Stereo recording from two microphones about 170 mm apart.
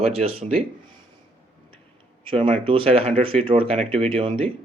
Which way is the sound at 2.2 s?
30° right (ahead or behind).